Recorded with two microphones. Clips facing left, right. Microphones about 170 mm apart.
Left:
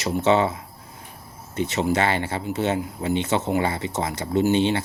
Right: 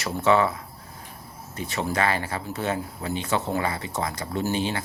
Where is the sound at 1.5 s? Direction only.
20° left (ahead or behind).